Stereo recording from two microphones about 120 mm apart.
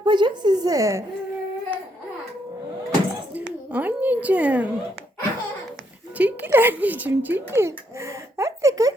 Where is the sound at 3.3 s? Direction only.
10° right (ahead or behind).